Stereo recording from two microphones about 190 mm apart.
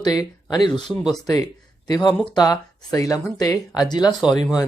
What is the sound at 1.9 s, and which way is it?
Speech, 25° left (ahead or behind).